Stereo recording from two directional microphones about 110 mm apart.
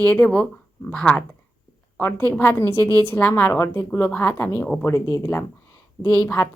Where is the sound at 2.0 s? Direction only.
20° left (ahead or behind).